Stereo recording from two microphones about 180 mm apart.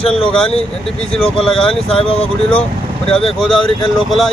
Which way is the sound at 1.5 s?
30° left (ahead or behind).